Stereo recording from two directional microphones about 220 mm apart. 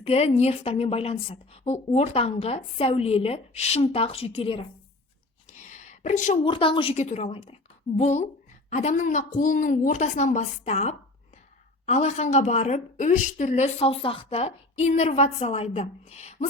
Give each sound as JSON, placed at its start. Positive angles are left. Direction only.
{"t": 0.0, "sound": "a woman's voice", "side_deg": 30}
{"t": 5.5, "sound": "a sound", "side_deg": 35}
{"t": 6.4, "sound": "a woman's voice", "side_deg": 25}